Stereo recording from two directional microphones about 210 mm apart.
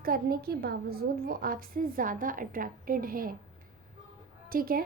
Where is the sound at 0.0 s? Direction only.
45° right (ahead or behind).